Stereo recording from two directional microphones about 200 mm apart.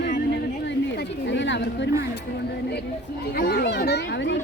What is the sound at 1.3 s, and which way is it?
Speech, 65° left (ahead or behind).